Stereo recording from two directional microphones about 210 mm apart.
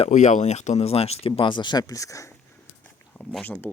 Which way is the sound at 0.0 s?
35° left (ahead or behind).